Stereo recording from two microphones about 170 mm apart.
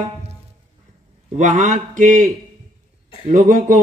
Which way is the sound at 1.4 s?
45° right (ahead or behind).